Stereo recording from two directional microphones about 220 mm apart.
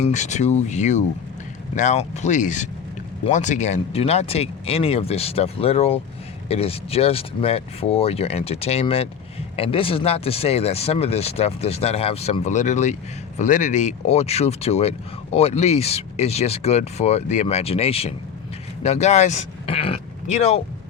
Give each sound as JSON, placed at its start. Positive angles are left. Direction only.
{"t": 0.0, "sound": "speech", "side_deg": 30}